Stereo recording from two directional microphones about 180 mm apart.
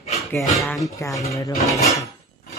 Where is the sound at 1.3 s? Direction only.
15° left (ahead or behind).